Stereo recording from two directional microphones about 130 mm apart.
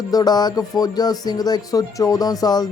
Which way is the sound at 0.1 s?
30° left (ahead or behind).